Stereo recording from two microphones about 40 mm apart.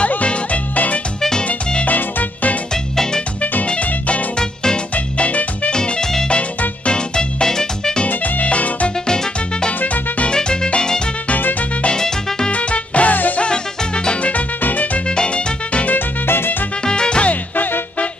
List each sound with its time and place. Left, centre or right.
0.2 s music: left
2.7 s music: centre
3.6 s music: left
5.7 s music: centre
8.1 s music: left
9.0 s music: centre
9.8 s music: left
10.3 s music: left
12.4 s music: left
14.2 s music: left
15.0 s music: left
16.3 s music: left
16.8 s music: left
17.3 s music: left